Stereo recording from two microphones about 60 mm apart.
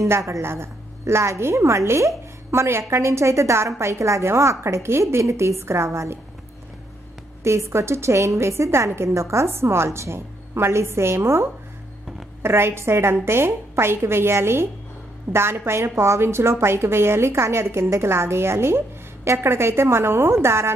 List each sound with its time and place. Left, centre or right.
0.1 s a woman's voice: right
0.4 s a woman's voice: right
7.4 s a woman's voice: right